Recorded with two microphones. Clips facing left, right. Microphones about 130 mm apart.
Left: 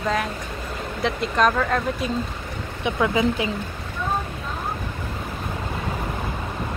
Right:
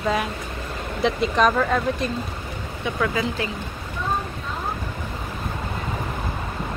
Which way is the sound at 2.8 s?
20° left (ahead or behind).